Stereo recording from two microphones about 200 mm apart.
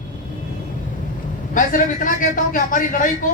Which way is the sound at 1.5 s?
40° left (ahead or behind).